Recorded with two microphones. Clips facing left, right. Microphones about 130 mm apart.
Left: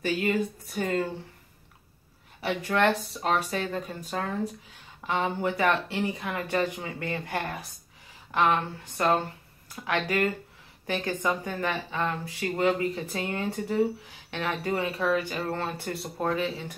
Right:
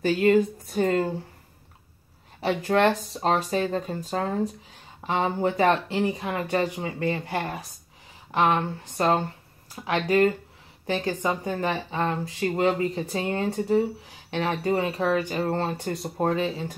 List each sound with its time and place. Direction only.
0.3 s speech: 30° right (ahead or behind)
2.4 s speech: 30° right (ahead or behind)
11.2 s speech: 30° right (ahead or behind)